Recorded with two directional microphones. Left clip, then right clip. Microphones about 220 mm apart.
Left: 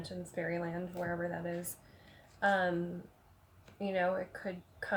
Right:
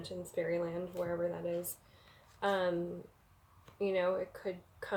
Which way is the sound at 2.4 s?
25° right (ahead or behind).